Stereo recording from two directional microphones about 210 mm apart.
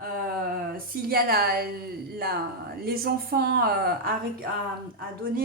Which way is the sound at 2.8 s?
45° right (ahead or behind).